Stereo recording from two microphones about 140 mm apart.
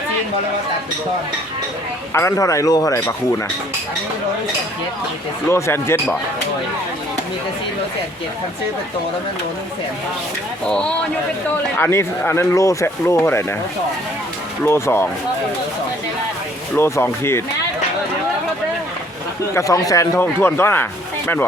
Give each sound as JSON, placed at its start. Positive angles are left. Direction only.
{"t": 2.1, "sound": "speech", "side_deg": 20}
{"t": 5.5, "sound": "speech", "side_deg": 20}
{"t": 10.7, "sound": "speech", "side_deg": 5}
{"t": 11.8, "sound": "speech", "side_deg": 15}
{"t": 14.6, "sound": "speech", "side_deg": 15}
{"t": 16.7, "sound": "speech", "side_deg": 15}
{"t": 19.5, "sound": "speech", "side_deg": 25}